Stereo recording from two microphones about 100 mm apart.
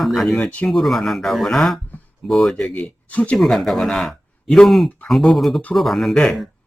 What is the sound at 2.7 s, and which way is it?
Speech, 15° left (ahead or behind).